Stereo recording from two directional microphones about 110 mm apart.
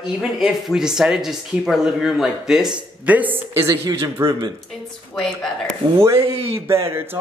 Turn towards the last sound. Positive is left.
turn(degrees=-25)  # may be behind; listen again after turning